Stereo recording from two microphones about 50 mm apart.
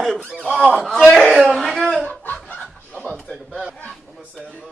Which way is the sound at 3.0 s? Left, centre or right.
Centre.